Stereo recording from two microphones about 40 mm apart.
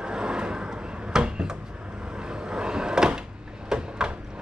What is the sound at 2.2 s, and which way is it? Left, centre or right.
Cupboard open or close, right.